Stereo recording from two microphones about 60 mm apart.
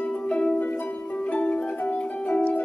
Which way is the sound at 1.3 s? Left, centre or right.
Centre.